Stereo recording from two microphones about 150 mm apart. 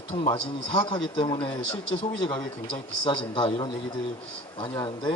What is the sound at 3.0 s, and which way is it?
Speech, 35° left (ahead or behind).